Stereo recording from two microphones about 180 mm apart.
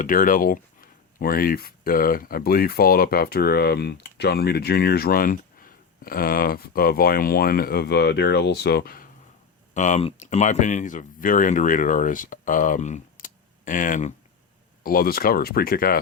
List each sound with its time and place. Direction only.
0.0 s speech: 50° left (ahead or behind)
9.7 s speech: 40° left (ahead or behind)